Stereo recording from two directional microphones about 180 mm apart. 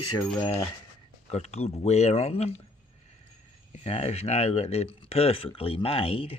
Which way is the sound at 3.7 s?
35° left (ahead or behind).